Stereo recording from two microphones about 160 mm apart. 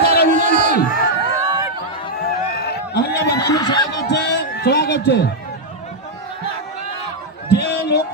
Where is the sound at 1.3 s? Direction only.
20° right (ahead or behind).